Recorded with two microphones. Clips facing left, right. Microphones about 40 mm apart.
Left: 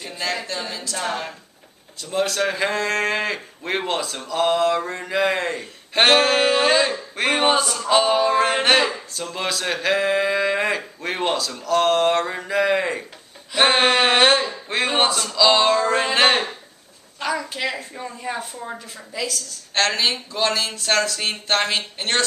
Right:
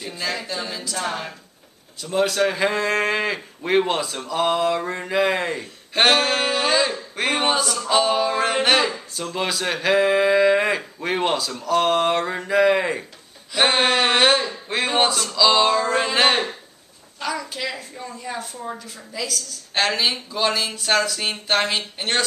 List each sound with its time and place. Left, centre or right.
0.0 s speech: centre
2.7 s speech: centre
13.5 s a woman's voice: centre